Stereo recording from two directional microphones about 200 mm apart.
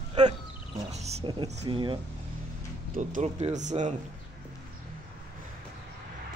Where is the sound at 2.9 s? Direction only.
35° right (ahead or behind).